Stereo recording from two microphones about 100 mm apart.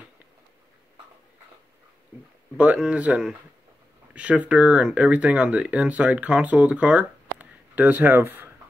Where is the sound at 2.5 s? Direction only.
10° right (ahead or behind).